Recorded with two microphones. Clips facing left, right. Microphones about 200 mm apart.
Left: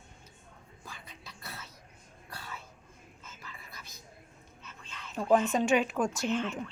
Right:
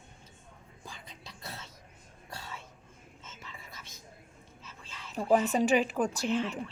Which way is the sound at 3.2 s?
25° right (ahead or behind).